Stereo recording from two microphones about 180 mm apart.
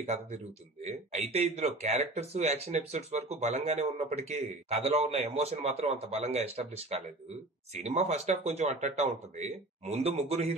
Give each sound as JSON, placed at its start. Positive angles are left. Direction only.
{"t": 0.0, "sound": "speech", "side_deg": -35}